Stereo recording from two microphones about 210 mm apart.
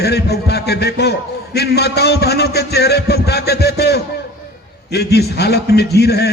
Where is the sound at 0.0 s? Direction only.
50° left (ahead or behind).